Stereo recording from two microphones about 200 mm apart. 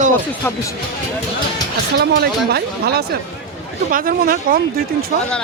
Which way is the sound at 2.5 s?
50° right (ahead or behind).